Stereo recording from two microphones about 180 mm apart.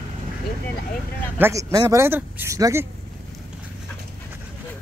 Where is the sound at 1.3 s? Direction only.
15° right (ahead or behind).